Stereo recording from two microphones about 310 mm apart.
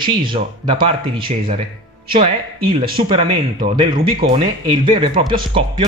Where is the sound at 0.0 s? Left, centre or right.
Centre.